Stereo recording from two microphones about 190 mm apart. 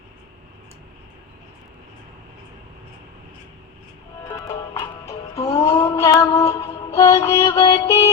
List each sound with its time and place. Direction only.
4.3 s music: 15° left (ahead or behind)